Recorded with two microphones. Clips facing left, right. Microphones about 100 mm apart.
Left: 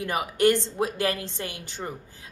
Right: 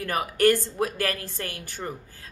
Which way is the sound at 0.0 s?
20° left (ahead or behind).